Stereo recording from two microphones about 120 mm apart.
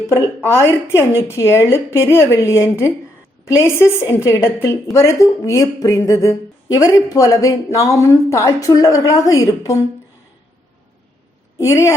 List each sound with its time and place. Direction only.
0.1 s speech: 20° left (ahead or behind)
11.5 s a woman's voice: 25° left (ahead or behind)